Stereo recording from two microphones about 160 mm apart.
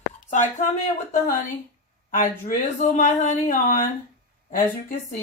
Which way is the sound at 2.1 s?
50° left (ahead or behind).